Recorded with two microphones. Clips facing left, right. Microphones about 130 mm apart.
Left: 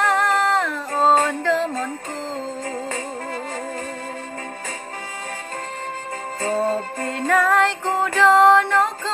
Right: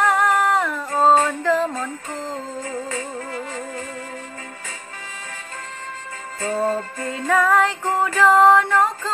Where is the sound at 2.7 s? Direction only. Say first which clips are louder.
Even; 35° left (ahead or behind).